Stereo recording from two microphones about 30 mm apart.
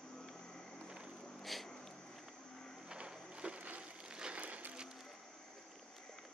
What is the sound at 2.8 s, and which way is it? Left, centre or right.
Music, right.